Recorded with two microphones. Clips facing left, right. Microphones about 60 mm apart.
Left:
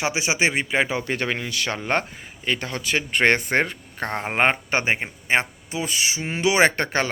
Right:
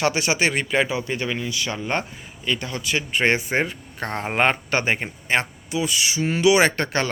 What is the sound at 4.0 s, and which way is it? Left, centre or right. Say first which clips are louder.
Speech: even; left.